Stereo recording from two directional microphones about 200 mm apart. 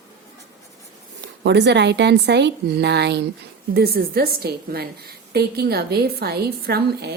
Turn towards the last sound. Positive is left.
turn(degrees=-50)  # may be behind; listen again after turning